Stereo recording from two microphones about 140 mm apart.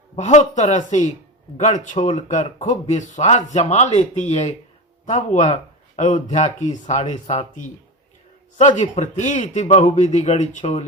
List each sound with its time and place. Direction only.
0.2 s speech: 60° left (ahead or behind)